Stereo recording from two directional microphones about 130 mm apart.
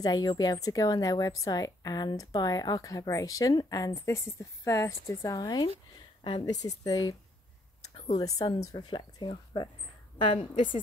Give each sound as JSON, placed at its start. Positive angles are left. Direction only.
{"t": 0.0, "sound": "a woman's voice", "side_deg": 30}
{"t": 8.2, "sound": "speech", "side_deg": 30}